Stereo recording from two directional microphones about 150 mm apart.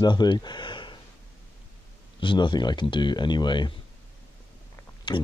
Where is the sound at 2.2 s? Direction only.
30° left (ahead or behind).